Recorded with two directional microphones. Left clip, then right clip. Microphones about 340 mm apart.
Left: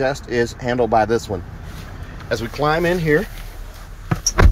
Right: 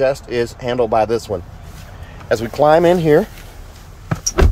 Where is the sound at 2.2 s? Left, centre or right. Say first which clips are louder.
Right 6 dB; centre.